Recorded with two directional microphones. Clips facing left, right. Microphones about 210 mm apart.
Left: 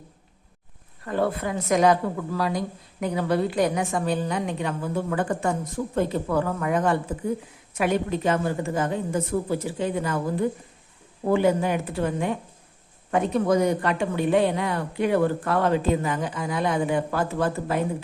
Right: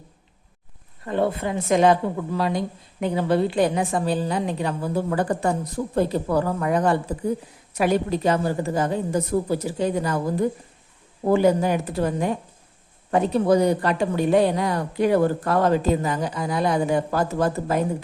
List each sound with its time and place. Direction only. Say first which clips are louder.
1.0 s a woman's voice: right 2 dB; 25° right (ahead or behind)
11.3 s a woman's voice: right 3 dB; 40° right (ahead or behind)